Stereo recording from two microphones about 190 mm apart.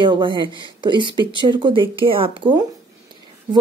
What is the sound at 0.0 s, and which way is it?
A woman's voice, 25° right (ahead or behind).